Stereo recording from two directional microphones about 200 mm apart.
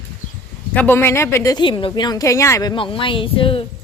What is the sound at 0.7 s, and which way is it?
Speech, 10° left (ahead or behind).